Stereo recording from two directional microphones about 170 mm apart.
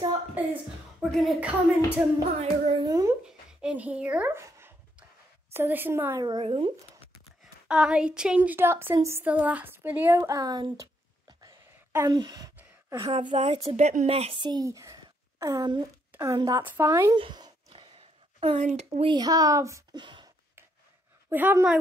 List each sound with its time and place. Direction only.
0.4 s a woman's voice: 10° right (ahead or behind)
2.2 s speech: 30° right (ahead or behind)
3.3 s speech: 5° right (ahead or behind)
6.2 s speech: 30° right (ahead or behind)
7.6 s speech: 5° right (ahead or behind); by 12.5 s 25° right (ahead or behind)
12.5 s a sound: 20° right (ahead or behind)
13.3 s speech: 40° right (ahead or behind); by 15.9 s 25° right (ahead or behind)
16.1 s a sound: 15° right (ahead or behind)
16.3 s speech: 20° right (ahead or behind)
17.2 s a sound: 25° right (ahead or behind)
19.0 s speech: 25° right (ahead or behind)
21.3 s speech: 10° right (ahead or behind)